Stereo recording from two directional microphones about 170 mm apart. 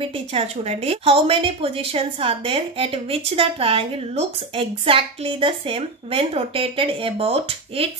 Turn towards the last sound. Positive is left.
turn(degrees=-35)  # may be behind; listen again after turning